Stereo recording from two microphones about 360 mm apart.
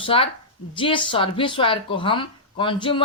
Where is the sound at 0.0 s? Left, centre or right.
Centre.